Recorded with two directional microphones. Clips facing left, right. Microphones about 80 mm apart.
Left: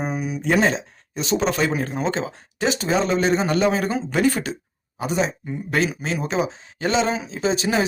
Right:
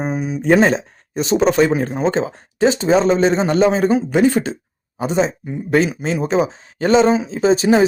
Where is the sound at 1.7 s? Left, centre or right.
Right.